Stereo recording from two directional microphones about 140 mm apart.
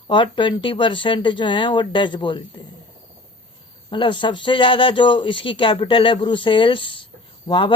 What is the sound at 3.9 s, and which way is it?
Speech, 35° left (ahead or behind).